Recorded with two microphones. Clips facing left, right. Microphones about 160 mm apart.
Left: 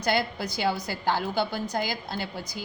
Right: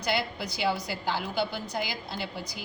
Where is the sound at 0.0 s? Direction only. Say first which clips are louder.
Left 3 dB; 45° left (ahead or behind).